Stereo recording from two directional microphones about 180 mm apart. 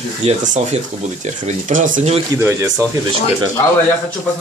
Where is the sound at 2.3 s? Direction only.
15° right (ahead or behind).